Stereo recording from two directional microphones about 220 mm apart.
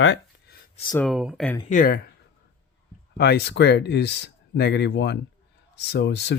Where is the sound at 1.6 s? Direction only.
35° left (ahead or behind).